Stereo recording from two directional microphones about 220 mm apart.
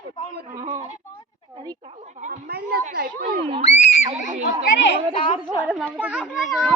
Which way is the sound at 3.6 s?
30° left (ahead or behind).